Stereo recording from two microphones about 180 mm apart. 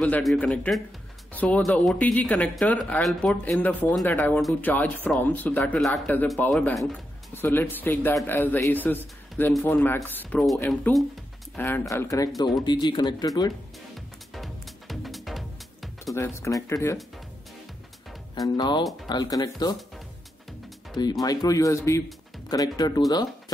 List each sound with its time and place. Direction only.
0.0 s speech: 5° left (ahead or behind)
10.7 s speech: centre (ahead or behind)
11.5 s speech: 10° left (ahead or behind)
14.3 s music: centre (ahead or behind)
16.2 s speech: 15° left (ahead or behind)
18.3 s speech: 20° left (ahead or behind)
20.9 s speech: 25° left (ahead or behind)